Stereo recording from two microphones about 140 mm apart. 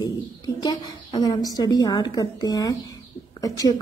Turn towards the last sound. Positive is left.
turn(degrees=25)  # may be behind; listen again after turning